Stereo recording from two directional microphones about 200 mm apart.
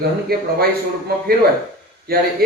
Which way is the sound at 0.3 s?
50° right (ahead or behind).